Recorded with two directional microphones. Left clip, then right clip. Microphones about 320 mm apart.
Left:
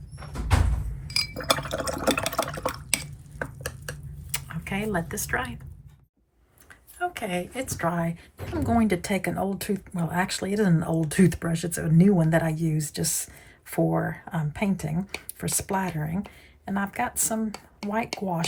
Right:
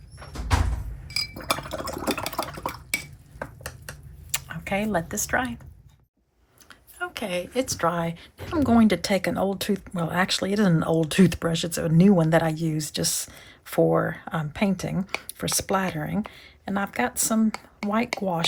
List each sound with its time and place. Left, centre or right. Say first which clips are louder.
1.0 s glass: left 2 dB; centre
2.2 s water: left 2 dB; left
4.3 s speech: right 5 dB; centre
7.0 s a woman's voice: even; centre